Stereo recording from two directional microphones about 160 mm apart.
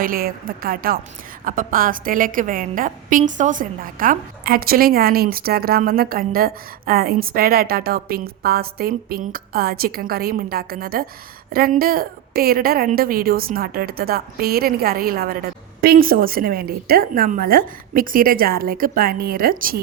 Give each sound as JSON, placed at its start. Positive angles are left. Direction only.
{"t": 0.0, "sound": "a woman's voice", "side_deg": -65}